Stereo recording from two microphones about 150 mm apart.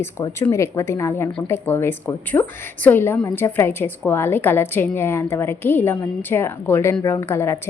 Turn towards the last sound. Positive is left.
turn(degrees=15)  # may be behind; listen again after turning